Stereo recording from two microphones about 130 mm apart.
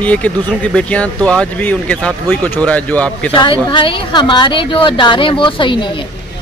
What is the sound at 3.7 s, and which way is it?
Speech, 40° left (ahead or behind).